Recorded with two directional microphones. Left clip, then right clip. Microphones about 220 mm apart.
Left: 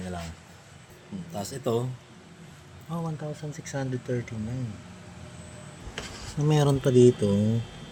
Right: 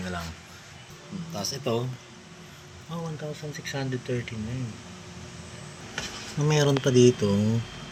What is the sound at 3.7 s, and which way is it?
Speech, 20° left (ahead or behind).